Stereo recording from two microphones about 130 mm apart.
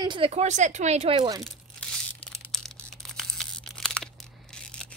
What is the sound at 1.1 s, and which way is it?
Speech, 40° right (ahead or behind).